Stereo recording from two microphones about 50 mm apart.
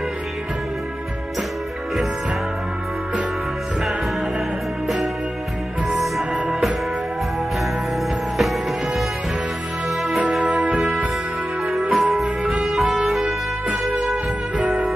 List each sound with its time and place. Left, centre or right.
5.9 s music: centre
8.4 s music: centre
10.4 s music: right
11.7 s music: centre